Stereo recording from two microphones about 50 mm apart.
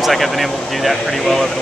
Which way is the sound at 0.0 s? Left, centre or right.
Centre.